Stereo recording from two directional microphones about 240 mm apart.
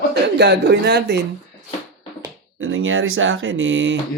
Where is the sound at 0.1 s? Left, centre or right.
Right.